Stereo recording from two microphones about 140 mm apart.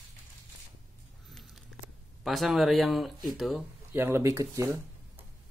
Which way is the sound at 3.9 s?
15° right (ahead or behind).